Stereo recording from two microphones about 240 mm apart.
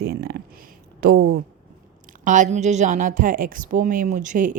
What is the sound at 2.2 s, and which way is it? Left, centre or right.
Speech, right.